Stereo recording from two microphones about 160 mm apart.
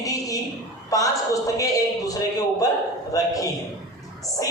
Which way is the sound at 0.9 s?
20° left (ahead or behind).